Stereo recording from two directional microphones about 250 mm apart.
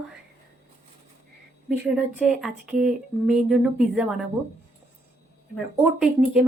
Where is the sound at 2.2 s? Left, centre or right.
Centre.